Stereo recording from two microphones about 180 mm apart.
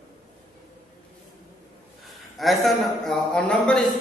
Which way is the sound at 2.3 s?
Centre (ahead or behind).